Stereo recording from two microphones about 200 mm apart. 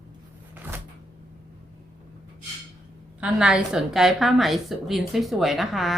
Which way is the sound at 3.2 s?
5° right (ahead or behind).